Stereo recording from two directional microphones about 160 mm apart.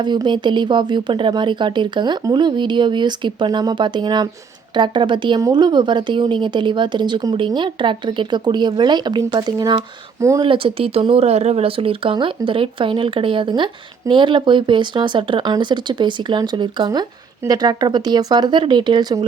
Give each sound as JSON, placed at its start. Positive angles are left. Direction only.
{"t": 0.0, "sound": "a woman's voice", "side_deg": -30}
{"t": 10.4, "sound": "a woman's voice", "side_deg": -35}